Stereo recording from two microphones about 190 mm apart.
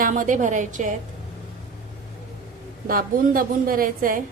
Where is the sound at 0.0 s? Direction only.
45° right (ahead or behind).